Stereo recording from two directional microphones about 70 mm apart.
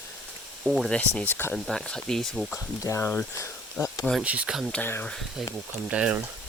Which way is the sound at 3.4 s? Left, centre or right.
Left.